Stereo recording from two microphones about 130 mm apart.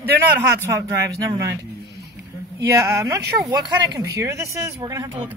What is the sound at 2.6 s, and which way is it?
Speech, 25° right (ahead or behind).